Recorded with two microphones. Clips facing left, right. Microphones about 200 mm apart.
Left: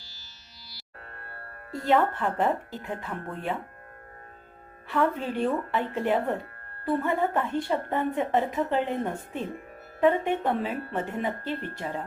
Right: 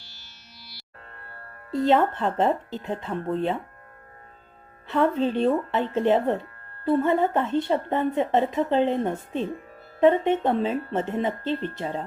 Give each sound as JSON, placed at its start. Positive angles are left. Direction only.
{"t": 1.7, "sound": "a woman's voice", "side_deg": -20}
{"t": 4.9, "sound": "a woman's voice", "side_deg": -20}